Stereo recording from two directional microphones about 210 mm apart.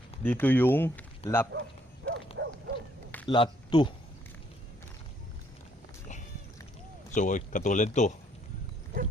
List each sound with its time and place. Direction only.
0.2 s speech: 10° left (ahead or behind)
1.2 s speech: 30° left (ahead or behind)
2.1 s dog: 55° right (ahead or behind)
3.2 s a man's voice: 20° left (ahead or behind)
7.1 s speech: 35° left (ahead or behind)